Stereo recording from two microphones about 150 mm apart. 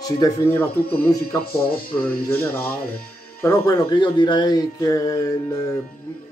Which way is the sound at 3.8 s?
30° left (ahead or behind).